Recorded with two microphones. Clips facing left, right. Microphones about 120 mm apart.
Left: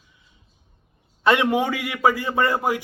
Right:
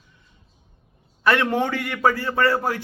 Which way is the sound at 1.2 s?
15° left (ahead or behind).